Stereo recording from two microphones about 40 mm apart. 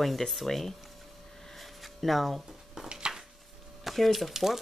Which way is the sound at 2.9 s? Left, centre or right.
Centre.